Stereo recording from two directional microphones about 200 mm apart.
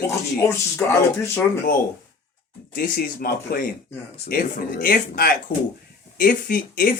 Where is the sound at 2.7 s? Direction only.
45° left (ahead or behind).